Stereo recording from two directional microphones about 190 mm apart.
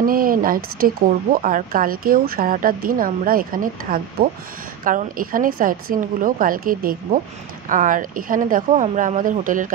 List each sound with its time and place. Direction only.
0.0 s speech: 50° right (ahead or behind)